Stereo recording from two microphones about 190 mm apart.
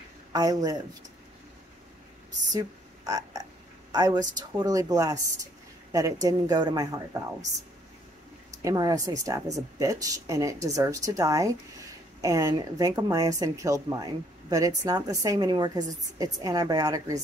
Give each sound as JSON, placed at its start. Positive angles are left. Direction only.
{"t": 0.3, "sound": "speech", "side_deg": -20}
{"t": 3.1, "sound": "speech", "side_deg": -20}
{"t": 8.6, "sound": "speech", "side_deg": -20}